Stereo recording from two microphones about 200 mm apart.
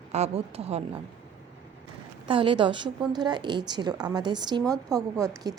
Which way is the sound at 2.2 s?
25° right (ahead or behind).